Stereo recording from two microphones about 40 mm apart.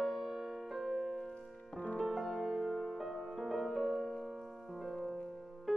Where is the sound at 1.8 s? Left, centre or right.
Left.